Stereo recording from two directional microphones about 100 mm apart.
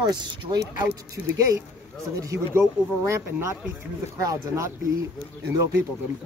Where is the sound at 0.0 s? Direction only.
45° right (ahead or behind).